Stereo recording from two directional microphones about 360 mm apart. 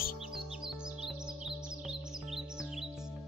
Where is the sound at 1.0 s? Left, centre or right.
Centre.